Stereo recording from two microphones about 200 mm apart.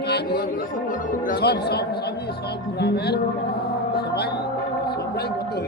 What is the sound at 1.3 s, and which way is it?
Speech, 55° left (ahead or behind).